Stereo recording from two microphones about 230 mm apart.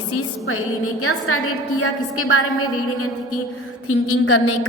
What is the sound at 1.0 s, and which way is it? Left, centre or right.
A woman's voice, left.